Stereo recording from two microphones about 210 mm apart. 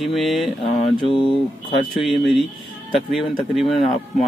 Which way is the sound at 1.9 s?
Centre (ahead or behind).